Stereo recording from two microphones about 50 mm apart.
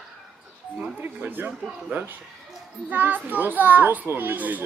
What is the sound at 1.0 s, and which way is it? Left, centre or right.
A child's voice, right.